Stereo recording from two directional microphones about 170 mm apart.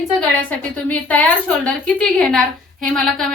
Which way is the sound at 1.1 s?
10° left (ahead or behind).